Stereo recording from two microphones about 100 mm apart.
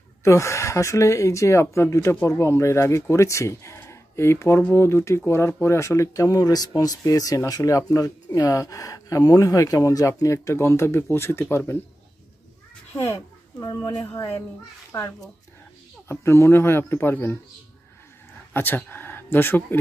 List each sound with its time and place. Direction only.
0.2 s speech: 30° left (ahead or behind)
14.1 s speech: 25° left (ahead or behind)
18.5 s a sound: 20° left (ahead or behind)
19.3 s speech: 20° left (ahead or behind)